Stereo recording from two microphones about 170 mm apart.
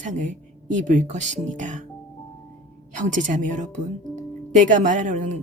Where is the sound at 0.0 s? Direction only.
45° right (ahead or behind).